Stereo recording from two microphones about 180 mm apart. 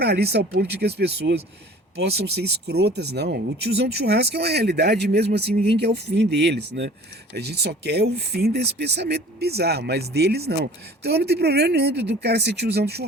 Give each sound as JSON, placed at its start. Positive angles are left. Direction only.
{"t": 0.0, "sound": "speech", "side_deg": -65}